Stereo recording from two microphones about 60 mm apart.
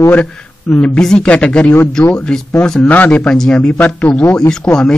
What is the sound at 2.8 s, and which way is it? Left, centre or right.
Speech, left.